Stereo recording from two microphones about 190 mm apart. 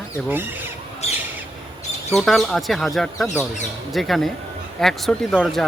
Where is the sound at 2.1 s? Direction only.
Centre (ahead or behind).